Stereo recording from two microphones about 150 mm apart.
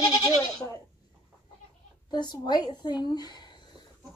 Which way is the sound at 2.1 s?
30° left (ahead or behind).